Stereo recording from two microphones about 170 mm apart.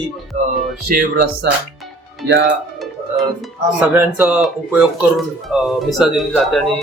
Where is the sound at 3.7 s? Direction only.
10° right (ahead or behind).